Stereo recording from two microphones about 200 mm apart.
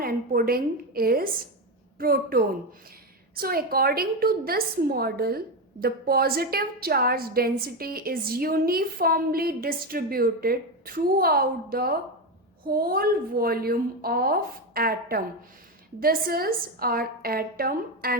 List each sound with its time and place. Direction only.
0.0 s a woman's voice: 45° right (ahead or behind)